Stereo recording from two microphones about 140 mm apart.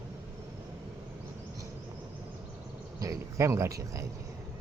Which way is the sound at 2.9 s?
25° right (ahead or behind).